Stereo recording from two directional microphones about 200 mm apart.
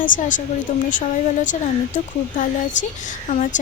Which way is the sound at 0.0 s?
40° left (ahead or behind).